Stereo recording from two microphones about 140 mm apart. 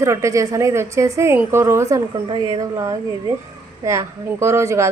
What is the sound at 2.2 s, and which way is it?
A woman's voice, 30° right (ahead or behind).